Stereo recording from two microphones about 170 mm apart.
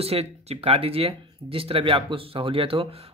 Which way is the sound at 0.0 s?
35° right (ahead or behind).